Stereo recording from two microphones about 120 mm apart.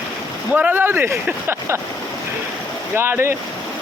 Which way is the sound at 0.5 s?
15° right (ahead or behind).